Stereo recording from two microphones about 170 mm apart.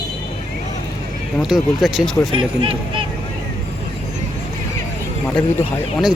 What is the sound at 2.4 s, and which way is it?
Speech, 30° right (ahead or behind).